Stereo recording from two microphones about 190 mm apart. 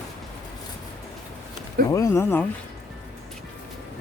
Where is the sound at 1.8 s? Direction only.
15° left (ahead or behind).